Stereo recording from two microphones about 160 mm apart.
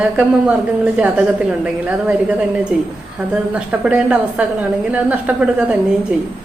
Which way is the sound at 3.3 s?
5° right (ahead or behind).